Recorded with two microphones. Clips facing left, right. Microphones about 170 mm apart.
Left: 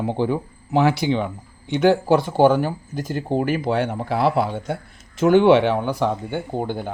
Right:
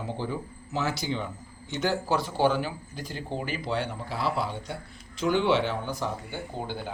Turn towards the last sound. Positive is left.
turn(degrees=55)  # may be behind; listen again after turning